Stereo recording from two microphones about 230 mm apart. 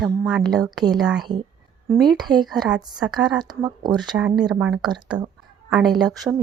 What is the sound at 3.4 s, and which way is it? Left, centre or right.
Speech, centre.